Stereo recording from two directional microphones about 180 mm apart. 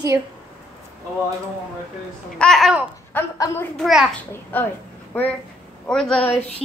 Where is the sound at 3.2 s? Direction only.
15° left (ahead or behind).